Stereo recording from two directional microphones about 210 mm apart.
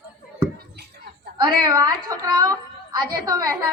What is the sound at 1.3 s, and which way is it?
A woman's voice, 20° right (ahead or behind).